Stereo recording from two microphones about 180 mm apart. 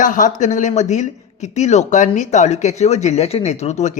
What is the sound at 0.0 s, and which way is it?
Speech, 45° left (ahead or behind).